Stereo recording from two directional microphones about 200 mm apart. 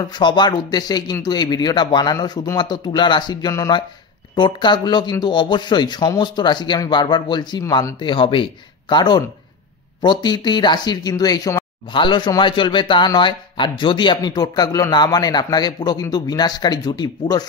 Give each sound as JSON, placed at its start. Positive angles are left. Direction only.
{"t": 0.0, "sound": "speech", "side_deg": 20}